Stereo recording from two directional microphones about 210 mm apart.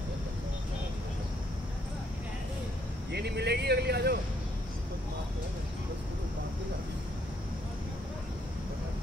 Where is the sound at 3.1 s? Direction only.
50° right (ahead or behind).